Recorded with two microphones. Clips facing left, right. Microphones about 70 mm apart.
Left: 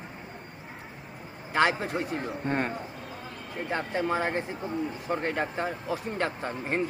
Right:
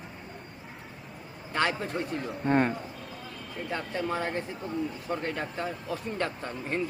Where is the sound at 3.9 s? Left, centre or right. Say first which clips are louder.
Left 3 dB; centre.